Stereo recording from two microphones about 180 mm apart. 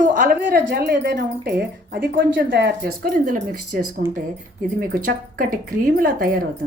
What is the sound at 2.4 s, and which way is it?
Speech, 80° right.